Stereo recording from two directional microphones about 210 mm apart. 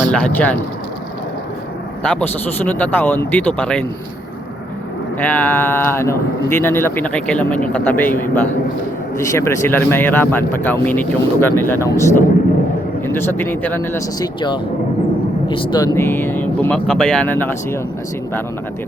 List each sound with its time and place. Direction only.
0.1 s speech: 5° left (ahead or behind)
2.0 s speech: 5° left (ahead or behind)
5.2 s speech: 10° left (ahead or behind)
16.0 s speech: 10° left (ahead or behind)